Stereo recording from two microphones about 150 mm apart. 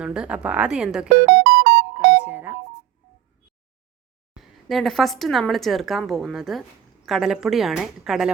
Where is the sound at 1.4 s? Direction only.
90° right.